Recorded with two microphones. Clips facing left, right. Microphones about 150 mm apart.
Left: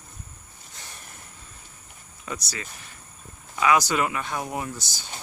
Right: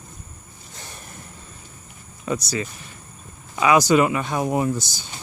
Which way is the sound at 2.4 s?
15° right (ahead or behind).